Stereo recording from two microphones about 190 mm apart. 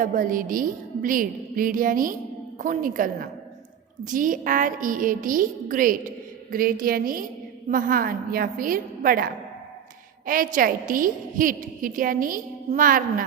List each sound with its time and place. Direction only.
0.0 s a woman's voice: 45° right (ahead or behind)